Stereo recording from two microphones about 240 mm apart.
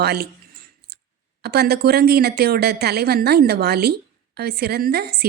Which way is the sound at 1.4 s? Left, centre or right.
Right.